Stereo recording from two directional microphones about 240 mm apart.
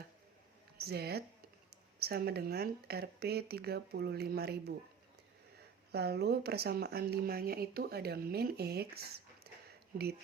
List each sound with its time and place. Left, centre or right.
0.8 s speech: right
5.9 s speech: right